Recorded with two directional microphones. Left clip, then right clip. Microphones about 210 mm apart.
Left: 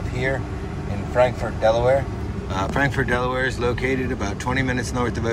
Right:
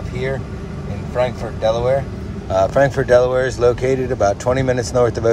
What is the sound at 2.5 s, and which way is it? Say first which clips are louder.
Speech: right 8 dB; 30° right (ahead or behind).